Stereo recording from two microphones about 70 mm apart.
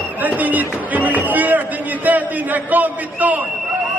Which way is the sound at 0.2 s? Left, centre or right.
Right.